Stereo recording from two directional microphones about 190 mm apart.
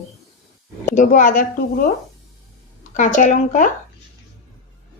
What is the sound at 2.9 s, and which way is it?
Speech, 40° left (ahead or behind).